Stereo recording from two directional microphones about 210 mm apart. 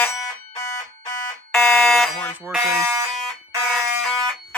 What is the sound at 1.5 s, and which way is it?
Fire alarm, 5° left (ahead or behind).